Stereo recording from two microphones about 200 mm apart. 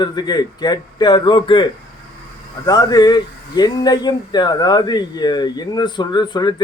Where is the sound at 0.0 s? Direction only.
20° left (ahead or behind).